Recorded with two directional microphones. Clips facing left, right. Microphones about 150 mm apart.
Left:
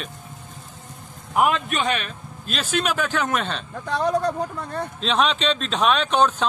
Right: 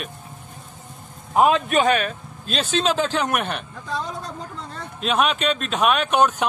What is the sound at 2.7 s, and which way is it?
Speech, 25° right (ahead or behind).